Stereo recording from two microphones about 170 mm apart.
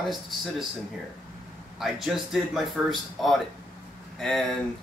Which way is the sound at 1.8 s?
Centre (ahead or behind).